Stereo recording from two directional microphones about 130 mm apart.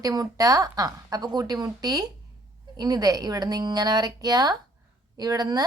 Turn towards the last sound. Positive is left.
turn(degrees=-30)  # may be behind; listen again after turning